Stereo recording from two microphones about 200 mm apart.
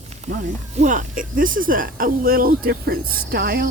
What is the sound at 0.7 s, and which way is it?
Speech, 40° right (ahead or behind).